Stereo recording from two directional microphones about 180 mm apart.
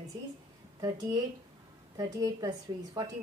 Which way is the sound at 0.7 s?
20° right (ahead or behind).